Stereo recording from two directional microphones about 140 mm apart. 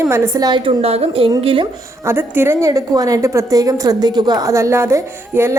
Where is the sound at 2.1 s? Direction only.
15° right (ahead or behind).